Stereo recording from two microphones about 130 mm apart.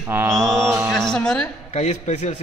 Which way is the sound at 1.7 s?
65° left (ahead or behind).